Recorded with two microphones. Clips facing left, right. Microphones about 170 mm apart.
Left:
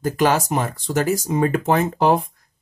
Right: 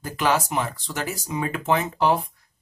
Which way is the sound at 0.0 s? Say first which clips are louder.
Left 5 dB; 45° left (ahead or behind).